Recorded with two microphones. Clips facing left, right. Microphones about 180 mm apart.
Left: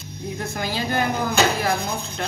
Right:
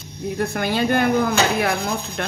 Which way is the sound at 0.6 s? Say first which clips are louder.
Right 4 dB; 60° right (ahead or behind).